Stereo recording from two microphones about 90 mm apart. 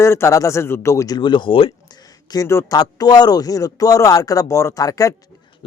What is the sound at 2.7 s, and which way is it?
Speech, 45° left (ahead or behind).